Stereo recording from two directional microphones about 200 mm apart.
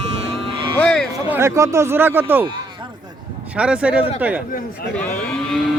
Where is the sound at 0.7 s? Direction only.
5° left (ahead or behind).